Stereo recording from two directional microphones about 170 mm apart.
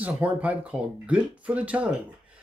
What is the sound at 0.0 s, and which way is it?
Speech, 10° right (ahead or behind).